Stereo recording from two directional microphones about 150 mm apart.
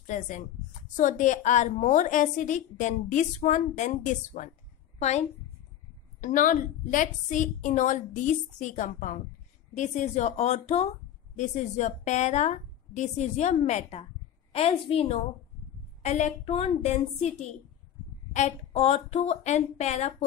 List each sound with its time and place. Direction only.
0.0 s a woman's voice: 55° left (ahead or behind)
4.9 s a sound: 50° left (ahead or behind)
6.2 s a woman's voice: 60° left (ahead or behind)